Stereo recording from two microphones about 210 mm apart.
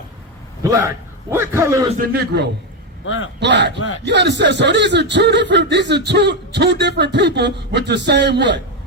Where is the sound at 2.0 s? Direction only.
45° right (ahead or behind).